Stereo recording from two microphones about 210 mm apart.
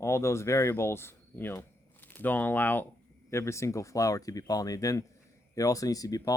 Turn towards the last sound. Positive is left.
turn(degrees=15)  # may be behind; listen again after turning